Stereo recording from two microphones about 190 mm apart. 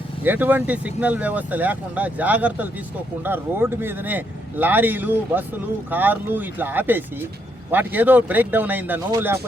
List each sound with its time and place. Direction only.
0.2 s speech: 10° right (ahead or behind)